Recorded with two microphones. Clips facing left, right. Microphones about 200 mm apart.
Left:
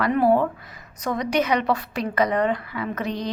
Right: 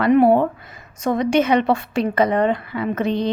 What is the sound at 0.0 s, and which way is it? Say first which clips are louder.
A woman's voice: right 5 dB; 25° right (ahead or behind).